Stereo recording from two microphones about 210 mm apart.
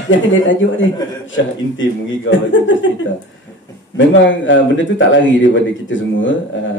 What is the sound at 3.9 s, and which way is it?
Speech, 60° left (ahead or behind).